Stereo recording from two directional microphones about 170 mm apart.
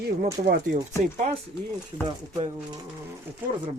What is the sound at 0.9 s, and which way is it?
Speech, 45° right (ahead or behind).